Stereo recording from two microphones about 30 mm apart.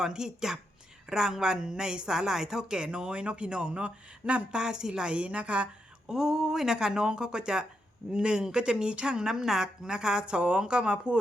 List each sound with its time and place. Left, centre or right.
0.0 s speech: centre; by 4.4 s right
4.5 s speech: right
5.1 s a woman's voice: right
6.1 s speech: centre
6.7 s speech: right
9.3 s speech: centre; by 11.2 s right